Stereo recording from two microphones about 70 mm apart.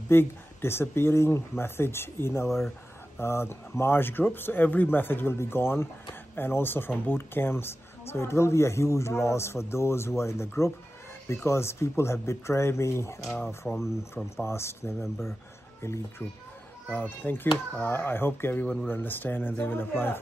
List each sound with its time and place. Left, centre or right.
0.1 s speech: left
13.6 s speech: centre
14.1 s speech: left
16.9 s speech: left